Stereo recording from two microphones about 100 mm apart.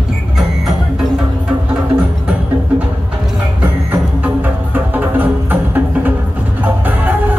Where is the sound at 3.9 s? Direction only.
20° right (ahead or behind).